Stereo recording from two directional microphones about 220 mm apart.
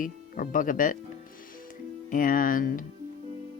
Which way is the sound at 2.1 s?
40° left (ahead or behind).